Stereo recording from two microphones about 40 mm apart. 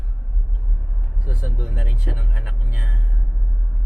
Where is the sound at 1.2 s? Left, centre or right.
Right.